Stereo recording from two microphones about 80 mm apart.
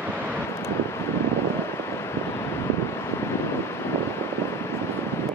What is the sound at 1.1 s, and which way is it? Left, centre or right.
Vehicle, left.